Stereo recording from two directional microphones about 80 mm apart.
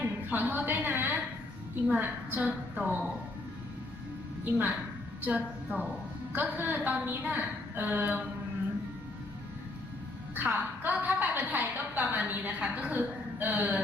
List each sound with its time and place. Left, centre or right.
0.0 s a woman's voice: right
4.5 s a woman's voice: right
10.3 s a woman's voice: right